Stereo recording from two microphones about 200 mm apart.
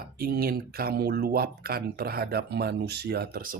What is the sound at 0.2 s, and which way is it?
Speech, 50° right (ahead or behind).